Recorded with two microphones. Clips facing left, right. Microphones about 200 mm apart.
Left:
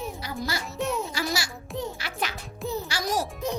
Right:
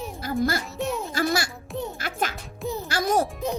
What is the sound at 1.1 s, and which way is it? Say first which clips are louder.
A child's voice: right 5 dB; 55° right (ahead or behind).